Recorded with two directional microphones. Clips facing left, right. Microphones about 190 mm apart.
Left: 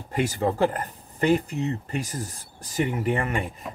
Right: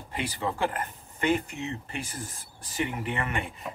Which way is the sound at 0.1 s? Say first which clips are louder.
Left 7 dB; 45° left (ahead or behind).